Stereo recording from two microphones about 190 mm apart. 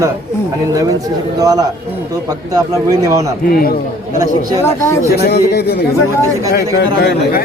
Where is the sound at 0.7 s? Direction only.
20° right (ahead or behind).